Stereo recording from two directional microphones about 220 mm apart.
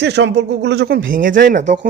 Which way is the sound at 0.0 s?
50° right (ahead or behind).